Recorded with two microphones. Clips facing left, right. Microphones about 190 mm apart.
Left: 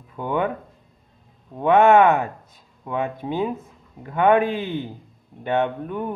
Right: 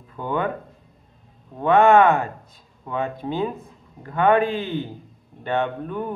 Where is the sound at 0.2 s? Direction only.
15° left (ahead or behind).